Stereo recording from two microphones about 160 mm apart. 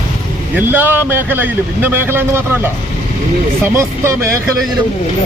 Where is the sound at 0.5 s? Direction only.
10° right (ahead or behind).